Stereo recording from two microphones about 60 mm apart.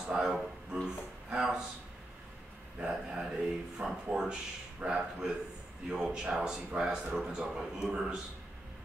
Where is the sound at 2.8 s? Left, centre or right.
Centre.